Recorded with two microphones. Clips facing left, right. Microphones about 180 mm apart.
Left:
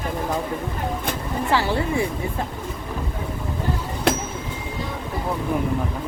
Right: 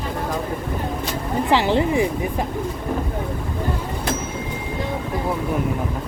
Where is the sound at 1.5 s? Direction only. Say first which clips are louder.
Right 4 dB; 20° right (ahead or behind).